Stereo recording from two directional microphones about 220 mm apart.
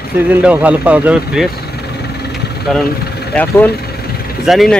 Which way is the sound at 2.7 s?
Centre (ahead or behind).